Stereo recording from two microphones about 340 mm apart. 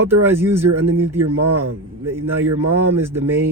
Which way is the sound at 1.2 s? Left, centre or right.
Right.